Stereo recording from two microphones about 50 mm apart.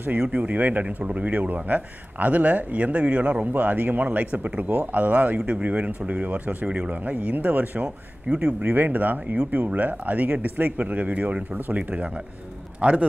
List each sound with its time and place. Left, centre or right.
0.0 s speech: right
3.5 s a man's voice: right